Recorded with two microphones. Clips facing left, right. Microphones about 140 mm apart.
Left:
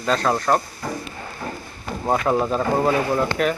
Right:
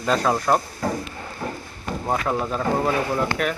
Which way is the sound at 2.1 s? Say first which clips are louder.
Left 4 dB; 15° left (ahead or behind).